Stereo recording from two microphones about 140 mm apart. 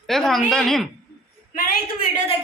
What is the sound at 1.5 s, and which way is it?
Speech, 90° left.